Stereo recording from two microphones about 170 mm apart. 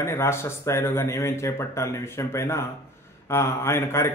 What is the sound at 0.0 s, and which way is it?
A man's voice, 15° left (ahead or behind).